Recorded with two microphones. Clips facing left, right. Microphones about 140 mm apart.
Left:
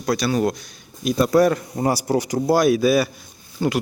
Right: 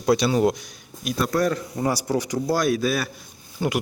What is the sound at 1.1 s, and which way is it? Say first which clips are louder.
Speech: left 6 dB; centre (ahead or behind).